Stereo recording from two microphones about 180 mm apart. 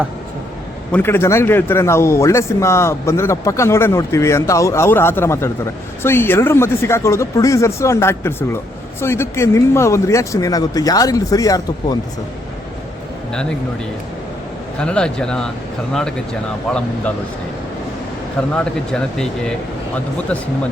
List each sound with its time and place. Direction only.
0.9 s a man's voice: 10° left (ahead or behind)
14.8 s speech: 5° left (ahead or behind)
18.5 s speech: 5° left (ahead or behind)